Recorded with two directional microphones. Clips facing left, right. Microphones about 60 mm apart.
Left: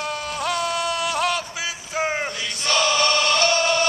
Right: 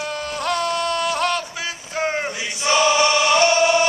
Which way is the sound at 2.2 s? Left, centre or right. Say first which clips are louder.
Right 4 dB; centre.